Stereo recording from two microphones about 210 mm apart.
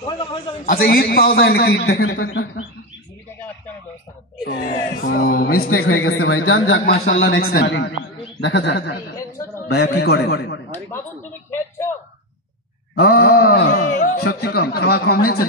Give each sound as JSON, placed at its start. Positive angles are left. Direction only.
{"t": 0.0, "sound": "a man's voice", "side_deg": 25}
{"t": 0.7, "sound": "speech", "side_deg": 45}
{"t": 2.2, "sound": "speech", "side_deg": 75}
{"t": 4.5, "sound": "speech", "side_deg": 45}
{"t": 5.8, "sound": "speech", "side_deg": 80}
{"t": 7.2, "sound": "a man's voice", "side_deg": 50}
{"t": 12.9, "sound": "speech", "side_deg": 50}